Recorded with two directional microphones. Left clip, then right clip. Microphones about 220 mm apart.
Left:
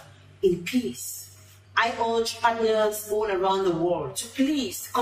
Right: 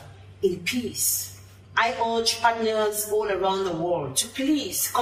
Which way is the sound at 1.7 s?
Centre (ahead or behind).